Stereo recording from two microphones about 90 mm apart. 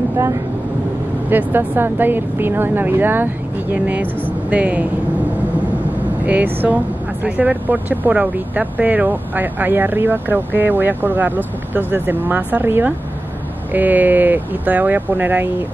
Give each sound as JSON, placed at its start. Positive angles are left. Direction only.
{"t": 1.3, "sound": "speech", "side_deg": -20}
{"t": 6.2, "sound": "speech", "side_deg": -20}